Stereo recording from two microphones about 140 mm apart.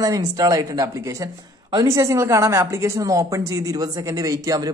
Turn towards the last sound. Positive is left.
turn(degrees=-25)  # may be behind; listen again after turning